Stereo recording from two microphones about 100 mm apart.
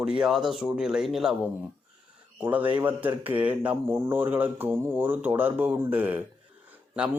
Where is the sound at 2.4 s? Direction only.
15° right (ahead or behind).